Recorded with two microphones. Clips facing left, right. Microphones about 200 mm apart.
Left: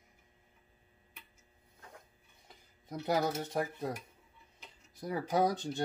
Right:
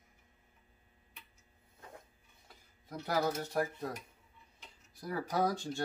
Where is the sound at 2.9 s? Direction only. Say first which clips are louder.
Left 1 dB; 20° left (ahead or behind).